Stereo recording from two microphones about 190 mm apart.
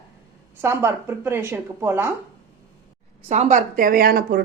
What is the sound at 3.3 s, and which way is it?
A woman's voice, 40° right (ahead or behind).